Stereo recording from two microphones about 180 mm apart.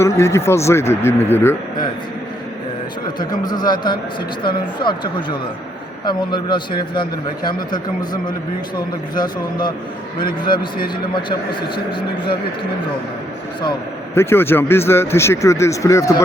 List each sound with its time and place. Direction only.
0.0 s speech: 15° left (ahead or behind)
3.2 s a man's voice: 25° left (ahead or behind)
14.2 s speech: 15° left (ahead or behind)